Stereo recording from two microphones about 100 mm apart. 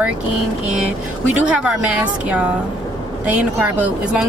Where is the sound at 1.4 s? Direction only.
10° right (ahead or behind).